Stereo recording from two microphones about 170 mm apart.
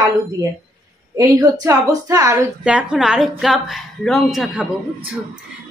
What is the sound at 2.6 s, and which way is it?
A woman's voice, 5° right (ahead or behind).